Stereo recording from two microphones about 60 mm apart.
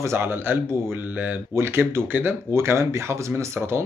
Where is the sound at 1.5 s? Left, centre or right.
Right.